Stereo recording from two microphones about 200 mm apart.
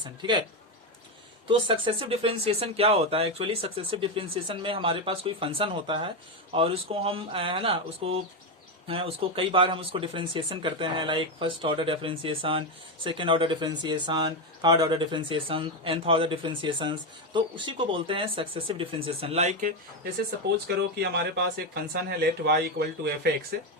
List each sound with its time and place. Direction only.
0.0 s speech: 25° right (ahead or behind)
1.5 s speech: 25° right (ahead or behind)
20.7 s speech: 55° right (ahead or behind)